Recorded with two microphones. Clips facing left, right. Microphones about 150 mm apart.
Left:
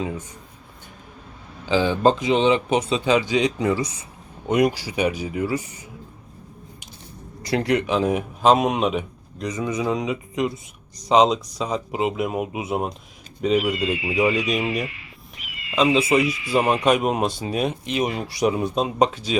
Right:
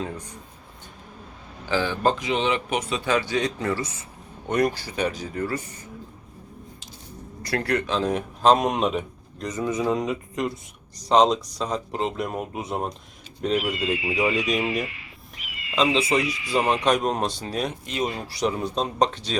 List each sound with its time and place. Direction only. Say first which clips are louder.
1.6 s a man's voice: left 5 dB; 15° left (ahead or behind)
7.4 s speech: left 4 dB; 20° left (ahead or behind)